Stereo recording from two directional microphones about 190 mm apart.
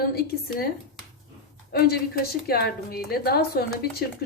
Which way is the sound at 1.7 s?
55° left (ahead or behind).